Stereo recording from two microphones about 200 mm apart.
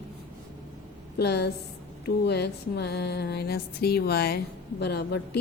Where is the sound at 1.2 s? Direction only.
55° left (ahead or behind).